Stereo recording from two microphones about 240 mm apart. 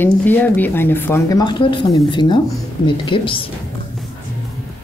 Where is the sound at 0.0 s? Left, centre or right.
Centre.